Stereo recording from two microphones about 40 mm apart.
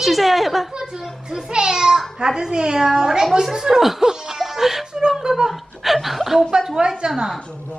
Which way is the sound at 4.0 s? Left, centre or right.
Centre.